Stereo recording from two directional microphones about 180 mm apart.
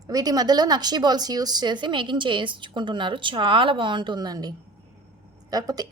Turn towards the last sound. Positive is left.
turn(degrees=-20)  # may be behind; listen again after turning